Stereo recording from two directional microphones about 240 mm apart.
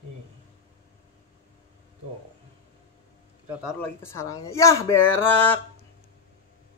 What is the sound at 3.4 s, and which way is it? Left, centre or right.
Speech, centre.